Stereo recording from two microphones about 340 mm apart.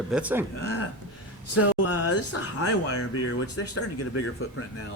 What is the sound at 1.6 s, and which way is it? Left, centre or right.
Speech, left.